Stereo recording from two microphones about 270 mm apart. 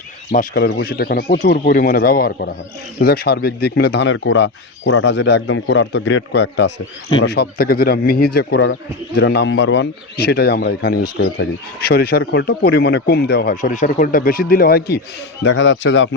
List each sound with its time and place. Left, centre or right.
0.3 s speech: left